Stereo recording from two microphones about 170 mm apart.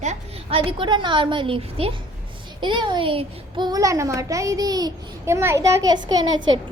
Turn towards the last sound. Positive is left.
turn(degrees=-25)  # may be behind; listen again after turning